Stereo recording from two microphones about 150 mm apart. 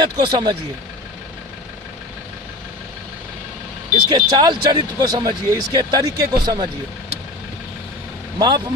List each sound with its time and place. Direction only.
0.0 s speech: 30° right (ahead or behind)
4.1 s speech: 25° right (ahead or behind)
8.4 s speech: 30° right (ahead or behind)